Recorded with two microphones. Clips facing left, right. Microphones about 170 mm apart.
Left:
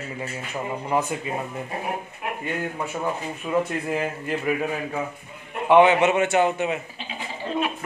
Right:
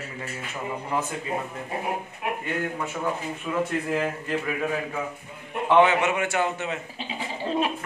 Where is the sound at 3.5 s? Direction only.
10° left (ahead or behind).